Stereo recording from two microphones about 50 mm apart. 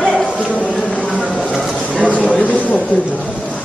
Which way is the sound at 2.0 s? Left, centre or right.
Left.